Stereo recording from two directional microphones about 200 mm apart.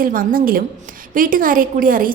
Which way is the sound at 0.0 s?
45° right (ahead or behind).